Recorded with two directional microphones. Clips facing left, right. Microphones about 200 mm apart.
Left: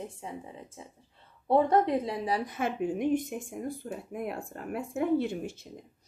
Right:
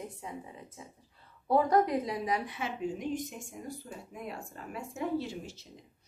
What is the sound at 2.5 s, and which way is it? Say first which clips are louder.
Speech: left 5 dB; 55° left (ahead or behind).